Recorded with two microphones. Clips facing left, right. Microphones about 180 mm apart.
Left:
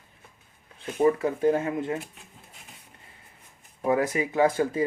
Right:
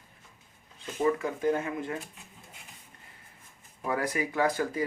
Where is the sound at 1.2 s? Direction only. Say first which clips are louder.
Left 5 dB; 30° left (ahead or behind).